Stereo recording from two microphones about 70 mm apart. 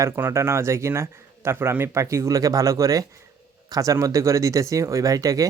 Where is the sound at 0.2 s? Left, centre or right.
Right.